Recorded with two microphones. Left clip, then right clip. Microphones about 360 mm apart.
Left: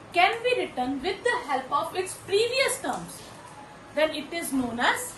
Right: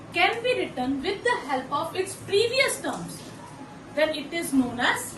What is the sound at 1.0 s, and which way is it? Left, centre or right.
A woman's voice, centre.